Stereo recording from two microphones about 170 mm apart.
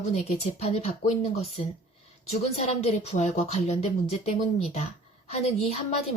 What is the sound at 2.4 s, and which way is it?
Speech, 35° left (ahead or behind).